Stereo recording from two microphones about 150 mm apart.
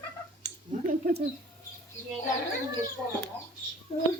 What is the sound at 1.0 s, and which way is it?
Speech, 90° right.